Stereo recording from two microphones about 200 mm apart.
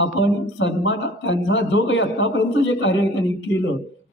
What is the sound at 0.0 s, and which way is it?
Speech, 70° left (ahead or behind).